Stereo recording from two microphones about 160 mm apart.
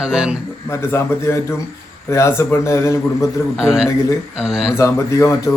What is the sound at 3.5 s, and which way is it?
A man's voice, 5° right (ahead or behind).